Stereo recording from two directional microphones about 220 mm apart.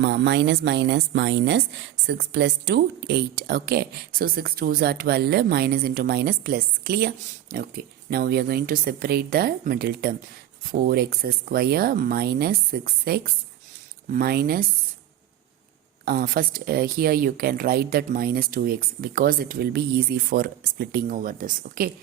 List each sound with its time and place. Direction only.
0.0 s a woman's voice: 50° right (ahead or behind)
16.0 s a woman's voice: 40° right (ahead or behind)